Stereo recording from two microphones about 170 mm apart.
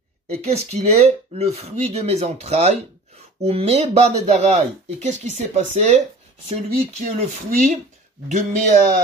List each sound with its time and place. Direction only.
0.3 s speech: 40° right (ahead or behind)